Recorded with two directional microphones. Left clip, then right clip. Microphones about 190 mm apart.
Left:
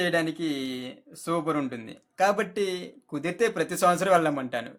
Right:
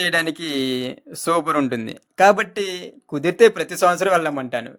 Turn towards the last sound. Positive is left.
turn(degrees=-30)  # may be behind; listen again after turning